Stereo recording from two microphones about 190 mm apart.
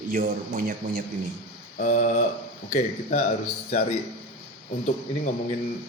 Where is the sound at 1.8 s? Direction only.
45° left (ahead or behind).